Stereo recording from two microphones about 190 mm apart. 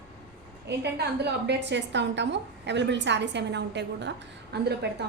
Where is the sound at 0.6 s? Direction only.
60° right (ahead or behind).